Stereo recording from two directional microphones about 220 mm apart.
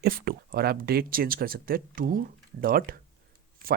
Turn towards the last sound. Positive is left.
turn(degrees=-40)  # may be behind; listen again after turning